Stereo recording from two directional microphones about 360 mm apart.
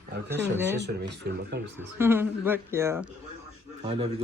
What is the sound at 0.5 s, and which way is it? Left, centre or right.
Speech, centre.